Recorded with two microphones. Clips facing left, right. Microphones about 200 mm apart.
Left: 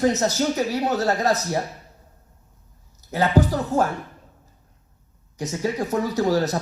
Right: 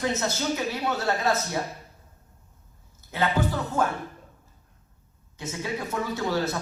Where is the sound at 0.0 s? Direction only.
40° left (ahead or behind).